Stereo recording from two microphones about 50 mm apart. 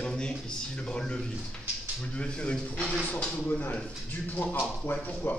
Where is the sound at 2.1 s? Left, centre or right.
Left.